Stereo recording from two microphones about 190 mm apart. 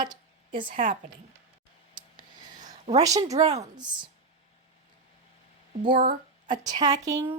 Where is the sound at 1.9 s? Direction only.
25° right (ahead or behind).